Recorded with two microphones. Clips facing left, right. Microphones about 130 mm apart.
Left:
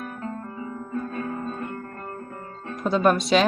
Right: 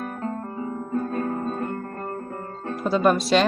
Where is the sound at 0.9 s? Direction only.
35° right (ahead or behind).